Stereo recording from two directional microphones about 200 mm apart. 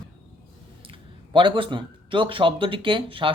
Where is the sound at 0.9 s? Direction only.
25° right (ahead or behind).